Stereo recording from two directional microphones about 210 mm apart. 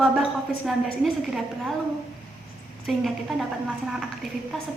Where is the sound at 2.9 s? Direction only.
Centre (ahead or behind).